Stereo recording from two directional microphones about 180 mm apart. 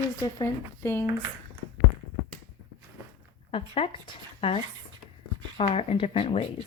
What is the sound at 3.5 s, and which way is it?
Speech, 30° left (ahead or behind).